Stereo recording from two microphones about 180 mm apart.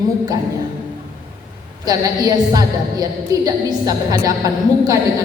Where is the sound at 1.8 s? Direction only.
20° right (ahead or behind).